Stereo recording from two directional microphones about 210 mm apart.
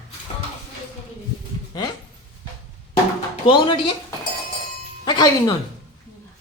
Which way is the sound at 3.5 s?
25° left (ahead or behind).